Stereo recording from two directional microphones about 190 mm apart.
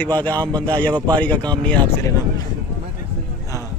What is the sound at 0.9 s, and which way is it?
Speech, 20° right (ahead or behind).